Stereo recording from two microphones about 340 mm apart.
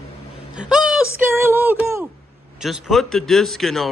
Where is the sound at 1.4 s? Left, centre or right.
Centre.